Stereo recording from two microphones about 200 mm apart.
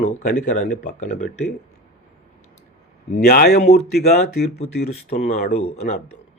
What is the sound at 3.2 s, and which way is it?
Speech, 50° left (ahead or behind).